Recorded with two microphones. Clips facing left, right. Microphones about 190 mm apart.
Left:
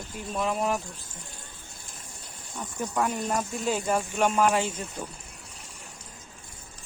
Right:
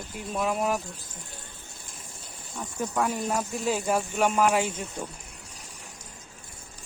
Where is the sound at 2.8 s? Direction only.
5° right (ahead or behind).